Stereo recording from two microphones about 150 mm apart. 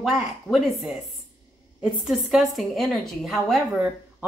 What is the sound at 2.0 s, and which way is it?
Speech, centre (ahead or behind).